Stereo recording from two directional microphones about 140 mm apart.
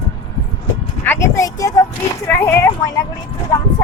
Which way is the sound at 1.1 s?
20° left (ahead or behind).